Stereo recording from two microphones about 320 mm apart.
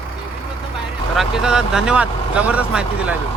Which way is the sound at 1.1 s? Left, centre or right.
Centre.